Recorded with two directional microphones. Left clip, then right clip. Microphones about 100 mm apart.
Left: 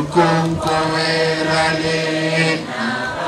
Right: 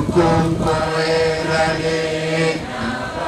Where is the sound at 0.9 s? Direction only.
50° left (ahead or behind).